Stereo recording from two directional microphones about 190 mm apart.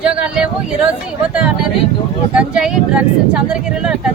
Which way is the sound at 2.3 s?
5° right (ahead or behind).